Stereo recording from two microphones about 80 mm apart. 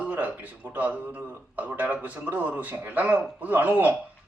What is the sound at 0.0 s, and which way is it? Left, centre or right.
A man's voice, centre.